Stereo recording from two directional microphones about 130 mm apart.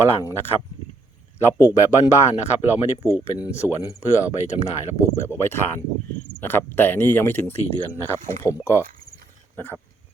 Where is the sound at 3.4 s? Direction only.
20° left (ahead or behind).